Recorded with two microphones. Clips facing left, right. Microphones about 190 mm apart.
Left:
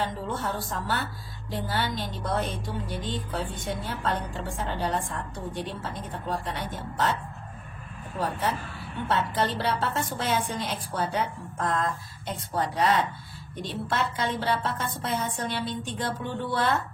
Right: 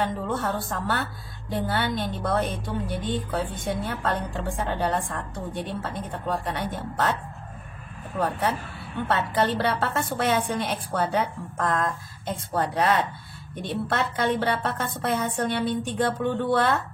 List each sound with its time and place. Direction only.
0.0 s a woman's voice: 55° right (ahead or behind)
8.2 s a woman's voice: 60° right (ahead or behind)